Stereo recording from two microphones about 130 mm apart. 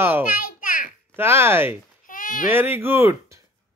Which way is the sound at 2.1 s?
90° left.